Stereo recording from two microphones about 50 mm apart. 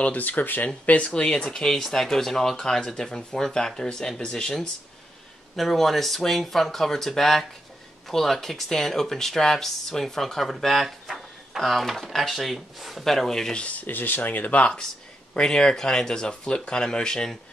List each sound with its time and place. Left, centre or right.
0.0 s speech: left
0.8 s speech: left
5.6 s speech: centre
13.6 s speech: left
15.3 s speech: centre